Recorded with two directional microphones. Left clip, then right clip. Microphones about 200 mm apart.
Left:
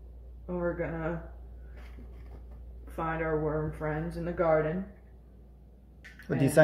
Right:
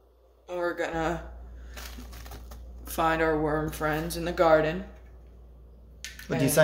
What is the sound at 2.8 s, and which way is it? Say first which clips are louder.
Speech: right 8 dB; 55° right (ahead or behind).